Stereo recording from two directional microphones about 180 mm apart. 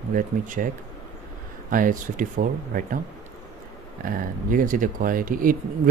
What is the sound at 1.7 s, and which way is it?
Speech, 50° right (ahead or behind).